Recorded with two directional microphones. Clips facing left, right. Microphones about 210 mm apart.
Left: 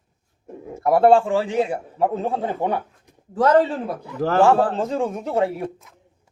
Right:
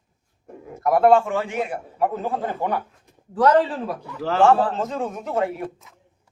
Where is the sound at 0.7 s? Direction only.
30° left (ahead or behind).